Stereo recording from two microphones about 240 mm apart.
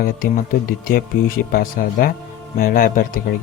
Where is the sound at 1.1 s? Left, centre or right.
Left.